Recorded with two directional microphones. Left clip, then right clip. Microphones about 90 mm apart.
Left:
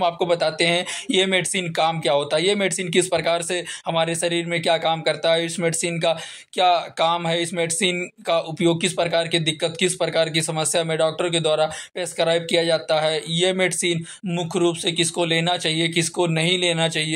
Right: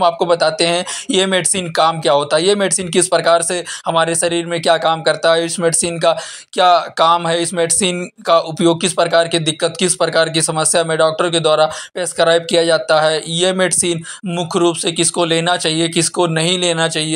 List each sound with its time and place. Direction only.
0.0 s speech: 20° right (ahead or behind)